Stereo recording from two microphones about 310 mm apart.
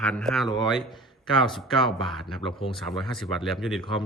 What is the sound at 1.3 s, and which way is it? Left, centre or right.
Speech, centre.